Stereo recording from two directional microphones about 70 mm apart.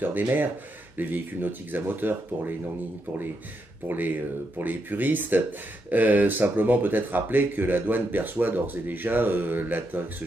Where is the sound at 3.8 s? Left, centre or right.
Right.